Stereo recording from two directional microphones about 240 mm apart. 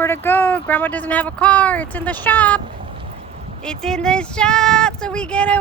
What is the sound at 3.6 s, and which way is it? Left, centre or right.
Speech, centre.